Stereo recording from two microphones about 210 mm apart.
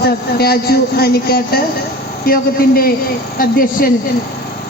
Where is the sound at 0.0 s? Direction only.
50° left (ahead or behind).